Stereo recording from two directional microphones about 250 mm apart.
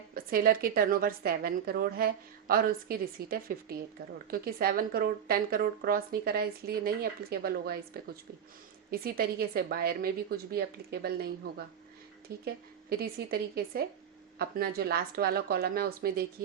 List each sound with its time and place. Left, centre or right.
0.1 s speech: right